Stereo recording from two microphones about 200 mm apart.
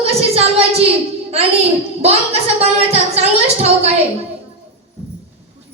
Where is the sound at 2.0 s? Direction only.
30° right (ahead or behind).